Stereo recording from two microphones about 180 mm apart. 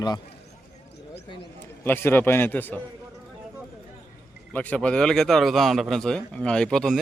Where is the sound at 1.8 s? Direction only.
10° left (ahead or behind).